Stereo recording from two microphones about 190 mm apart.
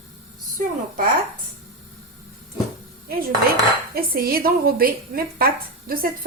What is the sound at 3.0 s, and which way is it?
A woman's voice, 55° right (ahead or behind).